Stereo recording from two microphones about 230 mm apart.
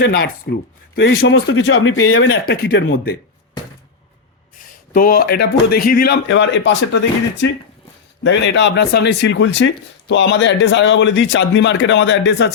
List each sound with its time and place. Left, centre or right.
0.0 s speech: left
2.5 s speech: left
4.9 s speech: left